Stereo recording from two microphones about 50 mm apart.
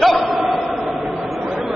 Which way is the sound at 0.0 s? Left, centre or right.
Centre.